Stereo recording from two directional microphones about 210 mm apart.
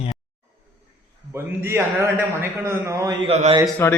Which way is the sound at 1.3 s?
10° right (ahead or behind).